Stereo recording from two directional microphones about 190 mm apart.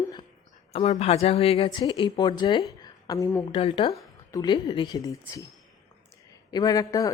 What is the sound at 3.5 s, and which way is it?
Speech, 30° left (ahead or behind).